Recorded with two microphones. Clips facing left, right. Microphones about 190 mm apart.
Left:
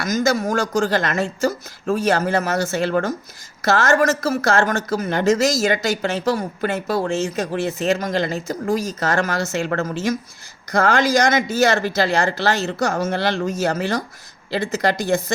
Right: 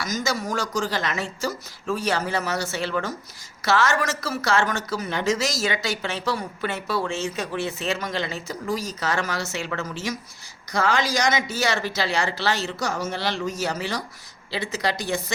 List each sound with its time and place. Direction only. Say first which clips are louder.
0.0 s a woman's voice: left 7 dB; 50° left (ahead or behind)